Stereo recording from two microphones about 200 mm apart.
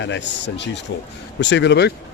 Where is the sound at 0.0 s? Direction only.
65° left (ahead or behind).